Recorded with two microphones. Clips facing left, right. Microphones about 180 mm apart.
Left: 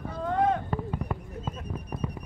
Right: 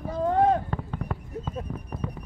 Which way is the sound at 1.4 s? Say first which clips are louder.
Even; 15° left (ahead or behind).